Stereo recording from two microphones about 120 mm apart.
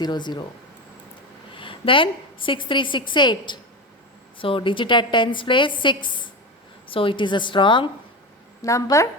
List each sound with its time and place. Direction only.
0.0 s speech: 40° left (ahead or behind)
1.5 s a woman's voice: 45° left (ahead or behind)
8.6 s a woman's voice: 25° left (ahead or behind)